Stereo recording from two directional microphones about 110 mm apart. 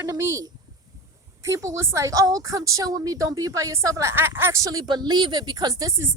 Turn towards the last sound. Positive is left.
turn(degrees=-40)  # may be behind; listen again after turning